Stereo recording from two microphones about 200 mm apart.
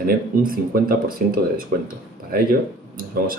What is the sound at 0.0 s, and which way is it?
Speech, 45° right (ahead or behind).